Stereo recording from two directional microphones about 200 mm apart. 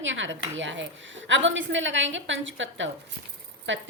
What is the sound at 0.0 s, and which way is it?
A woman's voice, 70° right (ahead or behind).